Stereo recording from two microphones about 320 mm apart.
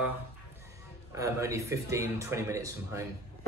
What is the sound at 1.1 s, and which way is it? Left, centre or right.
Speech, centre.